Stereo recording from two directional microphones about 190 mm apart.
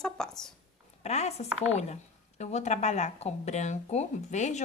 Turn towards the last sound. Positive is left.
turn(degrees=40)  # may be behind; listen again after turning